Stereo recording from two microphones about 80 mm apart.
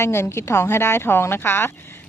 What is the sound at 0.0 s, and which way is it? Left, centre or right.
Speech, left.